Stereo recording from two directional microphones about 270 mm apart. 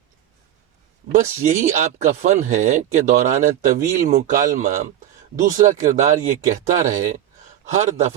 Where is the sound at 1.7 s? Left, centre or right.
Right.